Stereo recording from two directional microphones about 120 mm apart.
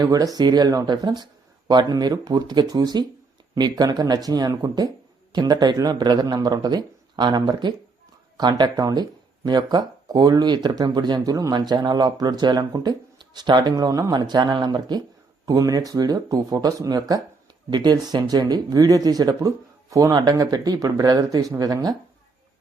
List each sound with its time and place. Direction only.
0.0 s speech: 30° right (ahead or behind)